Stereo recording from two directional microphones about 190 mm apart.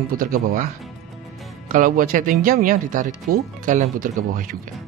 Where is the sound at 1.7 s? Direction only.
45° right (ahead or behind).